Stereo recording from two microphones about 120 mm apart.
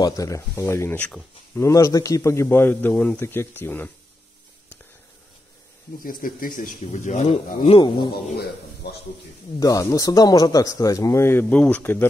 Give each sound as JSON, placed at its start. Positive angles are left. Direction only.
{"t": 0.0, "sound": "a man's voice", "side_deg": 25}
{"t": 1.6, "sound": "a man's voice", "side_deg": 25}
{"t": 6.6, "sound": "speech", "side_deg": 85}
{"t": 7.2, "sound": "speech", "side_deg": 50}
{"t": 9.6, "sound": "a man's voice", "side_deg": 30}